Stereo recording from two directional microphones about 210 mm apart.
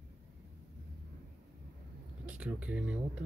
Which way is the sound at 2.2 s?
5° right (ahead or behind).